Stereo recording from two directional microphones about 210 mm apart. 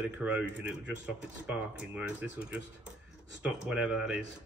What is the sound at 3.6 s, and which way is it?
Speech, 5° right (ahead or behind).